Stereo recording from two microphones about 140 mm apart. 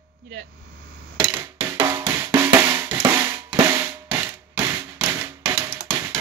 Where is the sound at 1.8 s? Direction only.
30° right (ahead or behind).